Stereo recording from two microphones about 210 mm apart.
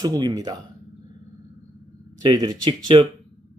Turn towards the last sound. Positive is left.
turn(degrees=-20)  # may be behind; listen again after turning